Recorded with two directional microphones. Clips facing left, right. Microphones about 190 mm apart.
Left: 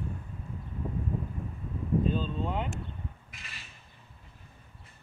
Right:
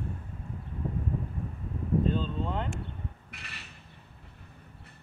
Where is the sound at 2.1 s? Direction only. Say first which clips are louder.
Even; 10° left (ahead or behind).